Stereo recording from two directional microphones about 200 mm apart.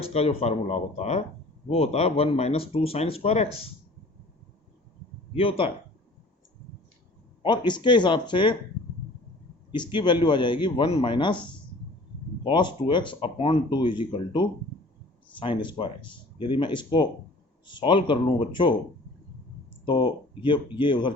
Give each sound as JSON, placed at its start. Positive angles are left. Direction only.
{"t": 0.0, "sound": "speech", "side_deg": 30}
{"t": 5.3, "sound": "speech", "side_deg": 25}
{"t": 7.4, "sound": "speech", "side_deg": 20}
{"t": 9.7, "sound": "speech", "side_deg": 25}
{"t": 19.8, "sound": "speech", "side_deg": 20}